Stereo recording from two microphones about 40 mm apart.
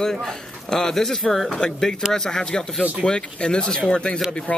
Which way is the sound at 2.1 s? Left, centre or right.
Centre.